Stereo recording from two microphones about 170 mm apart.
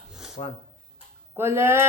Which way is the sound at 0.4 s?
35° left (ahead or behind).